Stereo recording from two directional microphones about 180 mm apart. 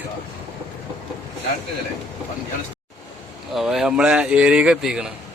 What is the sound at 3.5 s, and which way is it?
Speech, centre (ahead or behind).